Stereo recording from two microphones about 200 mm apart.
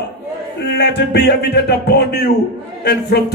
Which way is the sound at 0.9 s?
55° left (ahead or behind).